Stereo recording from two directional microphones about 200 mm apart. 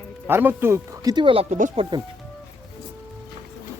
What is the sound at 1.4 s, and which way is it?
Speech, 40° right (ahead or behind).